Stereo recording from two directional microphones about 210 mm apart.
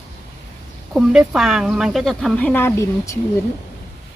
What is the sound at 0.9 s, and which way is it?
Speech, 5° right (ahead or behind).